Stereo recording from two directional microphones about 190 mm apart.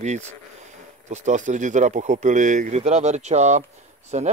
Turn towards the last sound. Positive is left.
turn(degrees=-35)  # may be behind; listen again after turning